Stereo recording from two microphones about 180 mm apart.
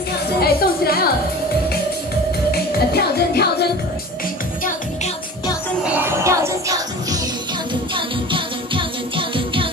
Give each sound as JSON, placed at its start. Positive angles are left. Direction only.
{"t": 0.4, "sound": "a sound", "side_deg": 60}
{"t": 2.5, "sound": "music", "side_deg": 60}
{"t": 5.9, "sound": "music", "side_deg": -10}
{"t": 7.9, "sound": "music", "side_deg": -30}